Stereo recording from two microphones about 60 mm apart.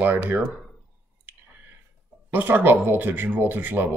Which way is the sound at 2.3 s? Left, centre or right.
Right.